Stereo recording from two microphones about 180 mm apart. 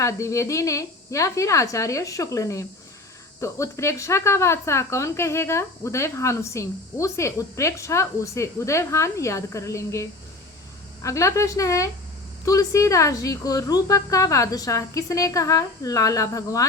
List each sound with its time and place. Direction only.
0.0 s a woman's voice: 15° left (ahead or behind)